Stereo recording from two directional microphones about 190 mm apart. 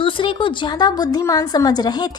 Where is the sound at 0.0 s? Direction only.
25° left (ahead or behind).